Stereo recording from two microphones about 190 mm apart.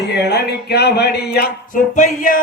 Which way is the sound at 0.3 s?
60° left (ahead or behind).